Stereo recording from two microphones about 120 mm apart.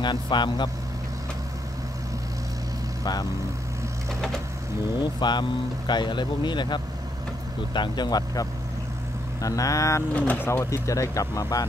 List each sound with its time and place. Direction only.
0.0 s speech: 40° left (ahead or behind)
3.0 s speech: 35° left (ahead or behind)
5.2 s speech: 40° left (ahead or behind)
10.1 s speech: 15° left (ahead or behind); by 11.6 s 30° left (ahead or behind)